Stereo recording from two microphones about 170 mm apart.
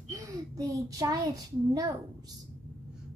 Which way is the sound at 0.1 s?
20° right (ahead or behind).